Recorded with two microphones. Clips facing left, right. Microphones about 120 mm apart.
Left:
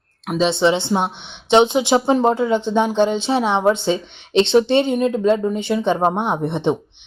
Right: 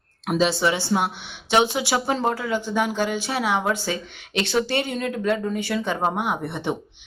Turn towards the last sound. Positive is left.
turn(degrees=20)  # may be behind; listen again after turning